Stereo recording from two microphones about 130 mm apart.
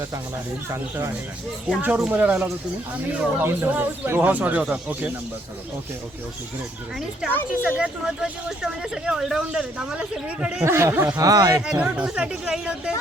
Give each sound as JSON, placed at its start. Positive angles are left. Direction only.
{"t": 0.7, "sound": "speech", "side_deg": -20}
{"t": 1.7, "sound": "speech", "side_deg": -5}
{"t": 6.9, "sound": "speech", "side_deg": -5}
{"t": 10.7, "sound": "speech", "side_deg": -20}
{"t": 11.2, "sound": "speech", "side_deg": -30}
{"t": 11.6, "sound": "speech", "side_deg": -10}